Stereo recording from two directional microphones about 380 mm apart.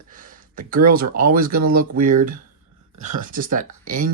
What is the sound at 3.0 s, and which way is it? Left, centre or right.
Speech, centre.